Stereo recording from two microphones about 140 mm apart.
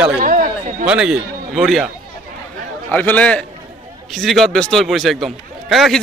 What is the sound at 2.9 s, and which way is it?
A man's voice, 10° left (ahead or behind).